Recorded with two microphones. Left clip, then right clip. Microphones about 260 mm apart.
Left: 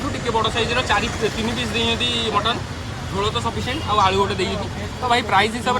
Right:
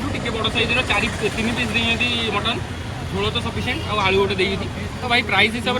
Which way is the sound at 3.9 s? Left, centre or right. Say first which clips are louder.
Left 1 dB; centre.